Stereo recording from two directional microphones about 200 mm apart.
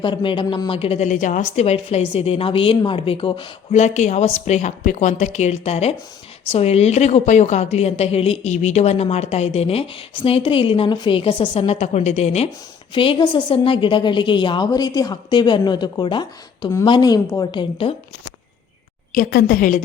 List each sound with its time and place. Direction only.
0.0 s a woman's voice: 25° left (ahead or behind)
19.1 s a woman's voice: 45° left (ahead or behind)